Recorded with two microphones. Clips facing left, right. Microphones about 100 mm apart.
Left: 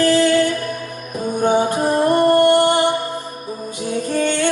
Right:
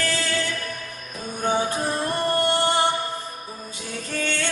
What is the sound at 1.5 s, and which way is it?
Music, 55° left (ahead or behind).